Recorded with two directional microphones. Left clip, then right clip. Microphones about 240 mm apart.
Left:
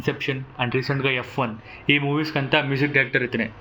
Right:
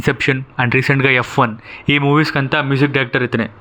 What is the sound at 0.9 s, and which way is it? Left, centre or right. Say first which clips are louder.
Speech: right 10 dB; right.